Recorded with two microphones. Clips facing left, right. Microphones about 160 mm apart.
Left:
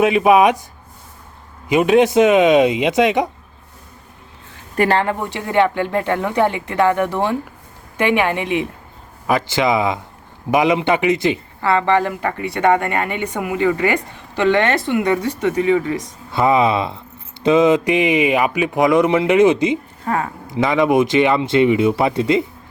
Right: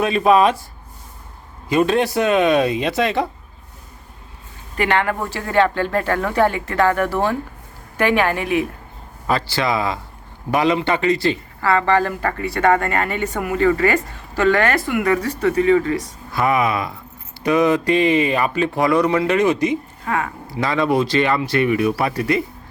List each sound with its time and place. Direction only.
0.0 s speech: 15° left (ahead or behind)
1.7 s speech: 15° left (ahead or behind)
4.8 s a woman's voice: 35° left (ahead or behind)
5.1 s speech: 20° left (ahead or behind)
20.1 s a woman's voice: 30° left (ahead or behind)
20.5 s speech: 20° left (ahead or behind)